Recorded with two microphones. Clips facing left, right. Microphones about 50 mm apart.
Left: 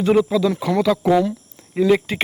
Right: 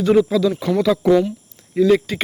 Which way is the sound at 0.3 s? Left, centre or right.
Centre.